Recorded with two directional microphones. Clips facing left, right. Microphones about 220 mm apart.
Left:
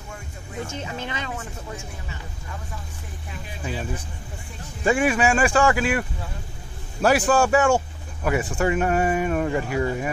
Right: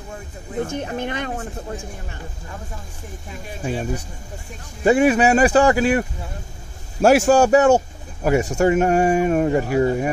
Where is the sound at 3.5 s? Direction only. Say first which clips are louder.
Right 6 dB; 45° right (ahead or behind).